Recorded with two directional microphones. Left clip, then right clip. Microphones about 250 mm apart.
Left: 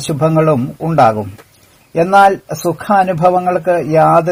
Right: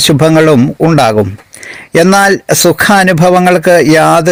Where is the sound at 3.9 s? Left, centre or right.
Right.